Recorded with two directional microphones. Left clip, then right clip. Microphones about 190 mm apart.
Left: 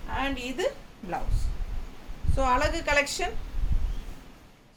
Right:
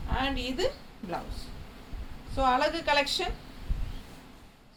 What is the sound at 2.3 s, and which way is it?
Speech, 20° left (ahead or behind).